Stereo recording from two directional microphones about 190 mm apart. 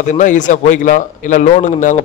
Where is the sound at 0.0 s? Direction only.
40° left (ahead or behind).